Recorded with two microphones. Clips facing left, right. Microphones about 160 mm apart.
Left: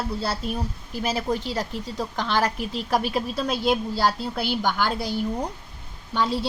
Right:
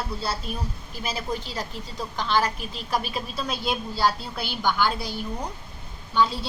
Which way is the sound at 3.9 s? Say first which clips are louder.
Left 1 dB; 85° left.